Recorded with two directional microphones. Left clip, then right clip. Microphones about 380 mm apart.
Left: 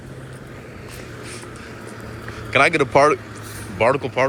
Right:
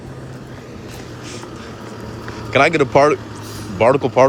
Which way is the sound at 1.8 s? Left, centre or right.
Right.